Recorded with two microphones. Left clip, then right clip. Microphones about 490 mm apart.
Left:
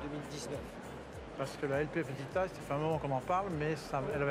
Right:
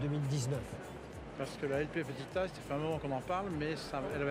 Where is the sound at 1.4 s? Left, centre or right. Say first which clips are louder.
Left 1 dB; left.